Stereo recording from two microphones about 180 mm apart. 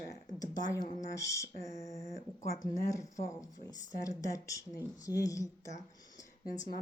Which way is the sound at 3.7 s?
20° left (ahead or behind).